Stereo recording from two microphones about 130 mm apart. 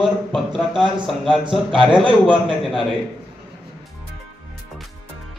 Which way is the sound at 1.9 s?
40° right (ahead or behind).